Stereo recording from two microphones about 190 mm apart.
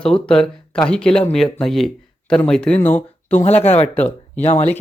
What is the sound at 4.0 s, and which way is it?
Speech, 10° left (ahead or behind).